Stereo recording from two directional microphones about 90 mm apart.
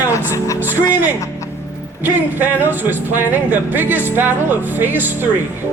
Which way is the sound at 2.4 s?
20° right (ahead or behind).